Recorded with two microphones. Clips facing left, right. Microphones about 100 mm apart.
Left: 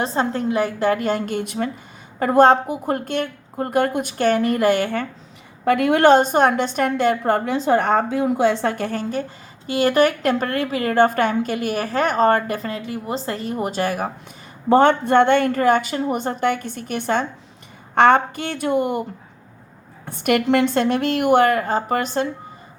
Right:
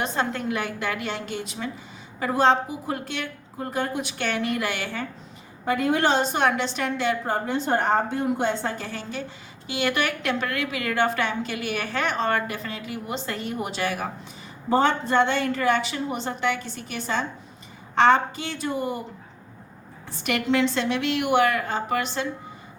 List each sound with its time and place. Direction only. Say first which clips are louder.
0.0 s a woman's voice: left 5 dB; 35° left (ahead or behind); by 5.0 s 50° left (ahead or behind)
5.6 s a woman's voice: left 8 dB; 65° left (ahead or behind); by 14.1 s 45° left (ahead or behind)
14.7 s a woman's voice: left 7 dB; 55° left (ahead or behind)
20.1 s a woman's voice: left 7 dB; 55° left (ahead or behind)